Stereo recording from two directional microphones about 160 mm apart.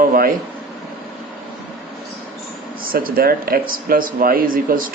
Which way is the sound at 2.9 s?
65° right (ahead or behind).